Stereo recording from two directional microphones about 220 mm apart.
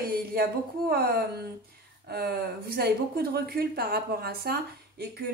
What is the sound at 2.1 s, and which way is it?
A woman's voice, 45° right (ahead or behind).